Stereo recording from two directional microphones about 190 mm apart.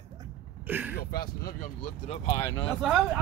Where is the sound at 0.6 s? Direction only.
10° right (ahead or behind).